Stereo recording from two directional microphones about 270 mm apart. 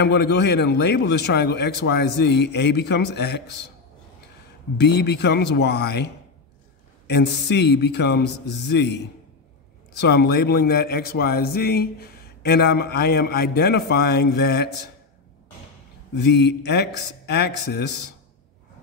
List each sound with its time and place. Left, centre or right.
0.0 s a man's voice: left
4.7 s a man's voice: left
16.2 s a man's voice: left